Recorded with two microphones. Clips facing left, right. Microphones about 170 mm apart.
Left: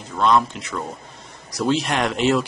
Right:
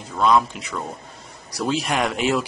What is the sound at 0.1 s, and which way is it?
Speech, 5° right (ahead or behind).